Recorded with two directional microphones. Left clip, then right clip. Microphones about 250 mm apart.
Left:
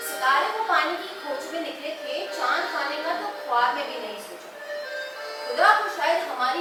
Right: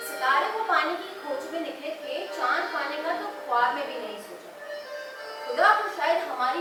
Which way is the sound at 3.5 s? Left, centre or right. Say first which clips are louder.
Left 2 dB; centre.